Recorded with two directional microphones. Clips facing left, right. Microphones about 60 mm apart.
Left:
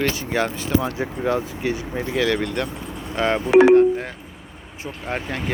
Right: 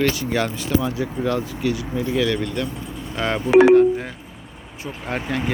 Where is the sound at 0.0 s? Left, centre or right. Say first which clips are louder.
Right 1 dB; left.